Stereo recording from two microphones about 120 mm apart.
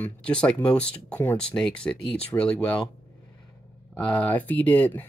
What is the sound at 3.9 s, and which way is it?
Speech, 10° left (ahead or behind).